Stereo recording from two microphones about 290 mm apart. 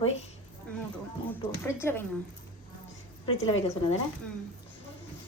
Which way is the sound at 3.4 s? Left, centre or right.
Left.